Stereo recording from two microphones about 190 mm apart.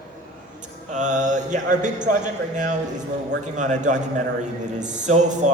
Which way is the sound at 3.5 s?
40° right (ahead or behind).